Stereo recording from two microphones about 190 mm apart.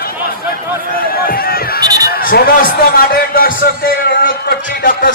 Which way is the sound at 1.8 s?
20° right (ahead or behind).